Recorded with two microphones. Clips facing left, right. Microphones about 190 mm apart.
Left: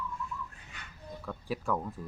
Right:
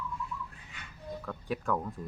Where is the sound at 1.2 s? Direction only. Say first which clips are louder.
Even; 5° left (ahead or behind).